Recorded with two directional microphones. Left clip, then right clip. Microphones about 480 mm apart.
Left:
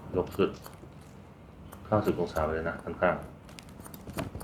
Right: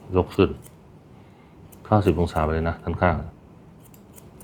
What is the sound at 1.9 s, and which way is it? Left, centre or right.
Speech, right.